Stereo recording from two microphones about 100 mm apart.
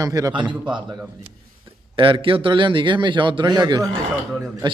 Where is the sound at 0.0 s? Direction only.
40° right (ahead or behind).